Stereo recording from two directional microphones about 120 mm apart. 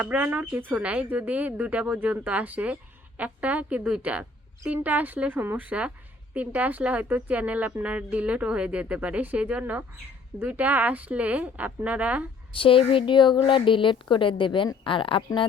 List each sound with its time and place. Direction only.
0.0 s speech: 15° right (ahead or behind)
12.5 s a woman's voice: 45° left (ahead or behind)